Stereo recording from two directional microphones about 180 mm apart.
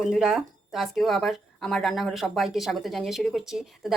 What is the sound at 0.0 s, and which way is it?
Speech, centre (ahead or behind).